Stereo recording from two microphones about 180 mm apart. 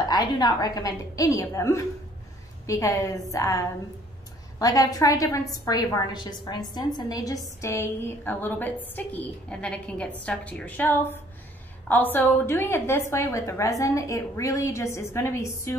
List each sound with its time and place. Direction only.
0.1 s a woman's voice: 20° left (ahead or behind)